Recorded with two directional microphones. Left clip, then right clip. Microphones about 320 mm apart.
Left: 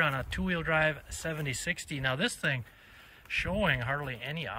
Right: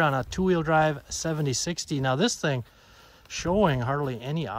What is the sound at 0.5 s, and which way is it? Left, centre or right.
Speech, centre.